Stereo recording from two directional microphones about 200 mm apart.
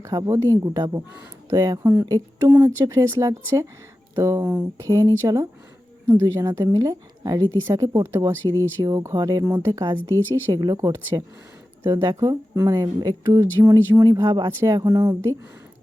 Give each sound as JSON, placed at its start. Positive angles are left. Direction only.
{"t": 0.0, "sound": "speech", "side_deg": -15}